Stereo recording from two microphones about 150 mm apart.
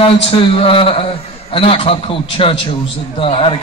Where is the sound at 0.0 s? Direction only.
35° left (ahead or behind).